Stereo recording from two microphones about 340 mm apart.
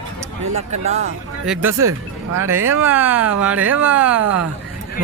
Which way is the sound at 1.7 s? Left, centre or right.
Right.